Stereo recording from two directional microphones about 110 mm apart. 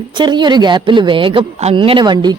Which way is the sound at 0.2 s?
45° right (ahead or behind).